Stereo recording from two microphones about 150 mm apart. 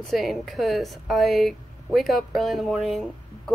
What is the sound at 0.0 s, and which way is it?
Speech, centre (ahead or behind).